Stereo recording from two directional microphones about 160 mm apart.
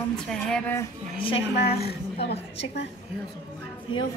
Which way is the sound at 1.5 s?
85° left.